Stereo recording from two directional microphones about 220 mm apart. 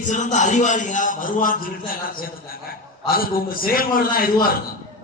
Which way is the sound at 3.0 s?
40° left (ahead or behind).